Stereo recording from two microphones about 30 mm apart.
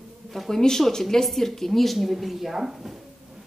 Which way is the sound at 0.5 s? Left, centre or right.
Centre.